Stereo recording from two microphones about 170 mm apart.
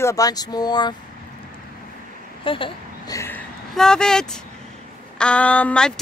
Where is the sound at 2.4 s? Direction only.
30° left (ahead or behind).